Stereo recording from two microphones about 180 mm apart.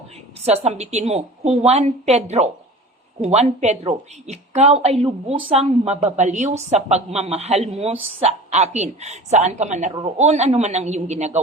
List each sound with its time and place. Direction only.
0.4 s a woman's voice: 35° right (ahead or behind)